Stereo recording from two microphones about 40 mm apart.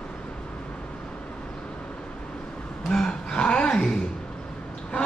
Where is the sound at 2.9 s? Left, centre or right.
Left.